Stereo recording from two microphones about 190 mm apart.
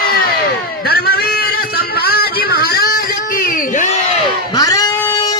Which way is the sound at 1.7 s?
55° left (ahead or behind).